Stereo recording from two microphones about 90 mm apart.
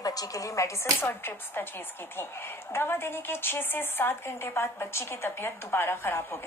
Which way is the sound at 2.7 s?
25° left (ahead or behind).